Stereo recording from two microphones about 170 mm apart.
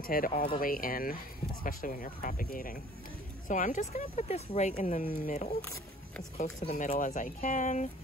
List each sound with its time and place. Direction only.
0.0 s speech: 55° left (ahead or behind)
4.7 s speech: 55° left (ahead or behind)
5.6 s speech: 15° left (ahead or behind)
6.3 s speech: 40° left (ahead or behind)